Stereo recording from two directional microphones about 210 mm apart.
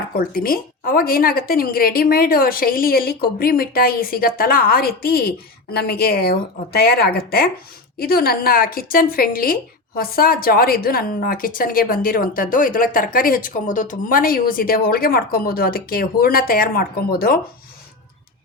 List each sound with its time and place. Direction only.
0.2 s a woman's voice: 45° left (ahead or behind)